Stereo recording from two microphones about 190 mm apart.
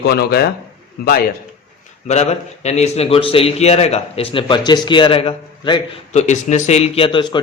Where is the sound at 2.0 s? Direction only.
35° left (ahead or behind).